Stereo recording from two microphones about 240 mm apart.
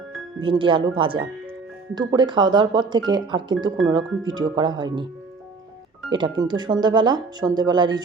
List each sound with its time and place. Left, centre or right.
0.4 s speech: right
6.1 s speech: centre